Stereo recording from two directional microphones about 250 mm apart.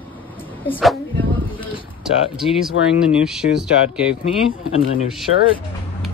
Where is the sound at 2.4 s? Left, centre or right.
Centre.